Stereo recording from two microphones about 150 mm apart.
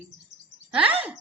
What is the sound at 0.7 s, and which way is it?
Speech, 10° right (ahead or behind).